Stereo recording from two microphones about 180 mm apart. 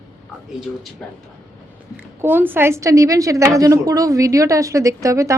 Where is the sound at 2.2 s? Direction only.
10° right (ahead or behind).